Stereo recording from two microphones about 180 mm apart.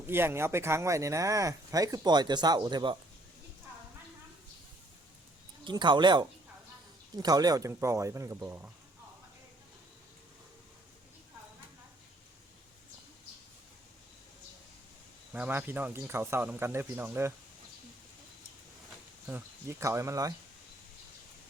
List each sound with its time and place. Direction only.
0.1 s speech: 15° right (ahead or behind)
5.6 s speech: 25° right (ahead or behind)
15.3 s speech: 10° right (ahead or behind)
19.3 s speech: 15° right (ahead or behind)